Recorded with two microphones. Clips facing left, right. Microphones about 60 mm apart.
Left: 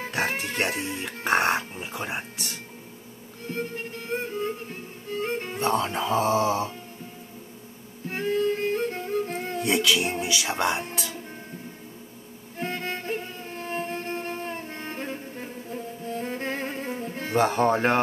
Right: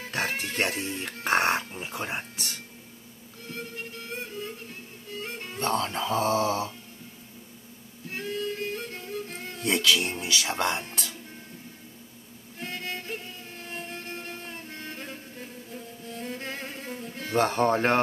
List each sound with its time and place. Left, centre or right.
0.8 s speech: centre
3.4 s music: left
5.6 s speech: centre
8.1 s music: left
9.6 s speech: centre
12.5 s music: left
17.4 s speech: centre